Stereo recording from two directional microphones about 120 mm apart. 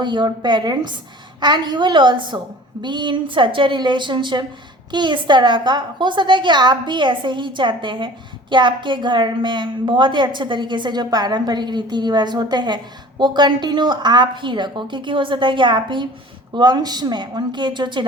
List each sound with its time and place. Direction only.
0.0 s a woman's voice: 40° right (ahead or behind)